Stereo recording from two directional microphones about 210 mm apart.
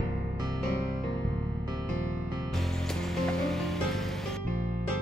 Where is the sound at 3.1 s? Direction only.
5° left (ahead or behind).